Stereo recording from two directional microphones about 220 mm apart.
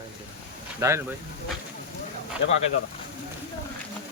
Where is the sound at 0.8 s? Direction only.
10° right (ahead or behind).